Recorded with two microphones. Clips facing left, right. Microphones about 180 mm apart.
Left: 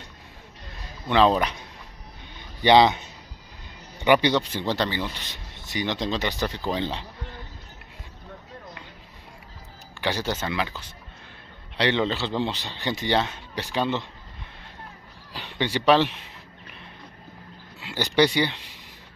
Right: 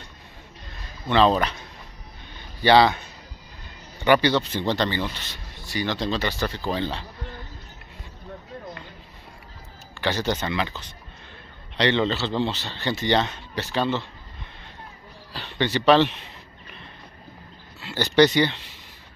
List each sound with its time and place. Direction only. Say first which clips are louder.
1.0 s speech: even; 10° left (ahead or behind)
2.3 s a sound: even; 20° left (ahead or behind)
4.0 s speech: right 1 dB; 15° left (ahead or behind)
9.9 s speech: right 2 dB; 10° left (ahead or behind)
15.3 s speech: right 2 dB; 10° left (ahead or behind)
17.7 s speech: right 3 dB; 15° left (ahead or behind)